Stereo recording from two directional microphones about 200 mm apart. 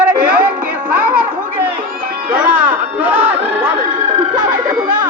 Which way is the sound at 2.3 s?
10° right (ahead or behind).